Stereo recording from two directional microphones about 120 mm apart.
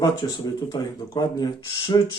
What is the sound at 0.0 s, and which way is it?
Speech, 35° left (ahead or behind).